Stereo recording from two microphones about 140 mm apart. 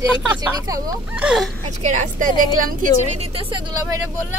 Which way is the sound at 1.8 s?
60° right (ahead or behind).